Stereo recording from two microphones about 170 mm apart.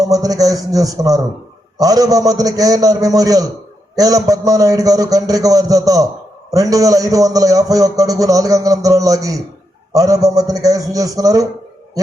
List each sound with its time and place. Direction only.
0.0 s a man's voice: 20° right (ahead or behind)